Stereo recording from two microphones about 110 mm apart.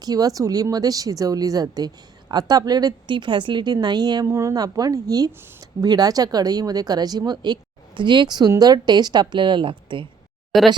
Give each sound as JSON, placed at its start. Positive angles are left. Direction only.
{"t": 0.0, "sound": "speech", "side_deg": -35}
{"t": 4.3, "sound": "speech", "side_deg": -25}
{"t": 5.4, "sound": "speech", "side_deg": -20}
{"t": 5.8, "sound": "speech", "side_deg": -35}
{"t": 10.5, "sound": "speech", "side_deg": 0}